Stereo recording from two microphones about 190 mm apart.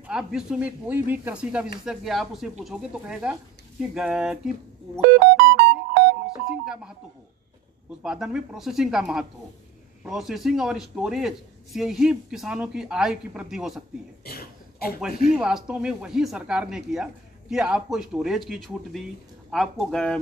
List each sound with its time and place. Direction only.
0.0 s a man's voice: 5° right (ahead or behind)
5.0 s music: 60° right (ahead or behind)
6.3 s music: 5° right (ahead or behind)
8.0 s a man's voice: 5° right (ahead or behind)
14.2 s cough: 55° left (ahead or behind)
15.3 s a man's voice: 5° right (ahead or behind)